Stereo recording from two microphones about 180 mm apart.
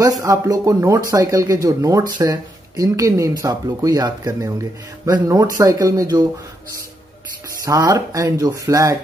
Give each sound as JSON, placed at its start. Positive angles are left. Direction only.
{"t": 0.0, "sound": "speech", "side_deg": -20}
{"t": 7.6, "sound": "speech", "side_deg": -20}